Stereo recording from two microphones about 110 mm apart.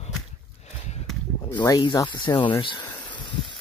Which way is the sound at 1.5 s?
40° left (ahead or behind).